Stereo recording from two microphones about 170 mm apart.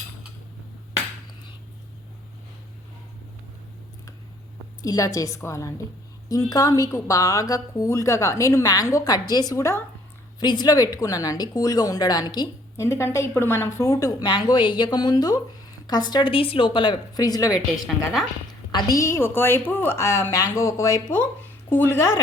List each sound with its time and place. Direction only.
4.8 s a woman's voice: 20° left (ahead or behind)
17.8 s a woman's voice: centre (ahead or behind)
18.7 s a woman's voice: 25° left (ahead or behind)